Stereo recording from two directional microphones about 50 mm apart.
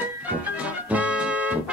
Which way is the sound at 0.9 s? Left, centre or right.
Right.